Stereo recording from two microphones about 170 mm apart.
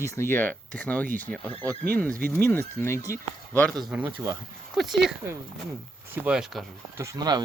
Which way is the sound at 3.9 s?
10° right (ahead or behind).